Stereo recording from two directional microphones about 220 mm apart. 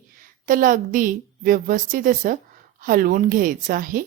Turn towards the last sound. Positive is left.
turn(degrees=-40)  # may be behind; listen again after turning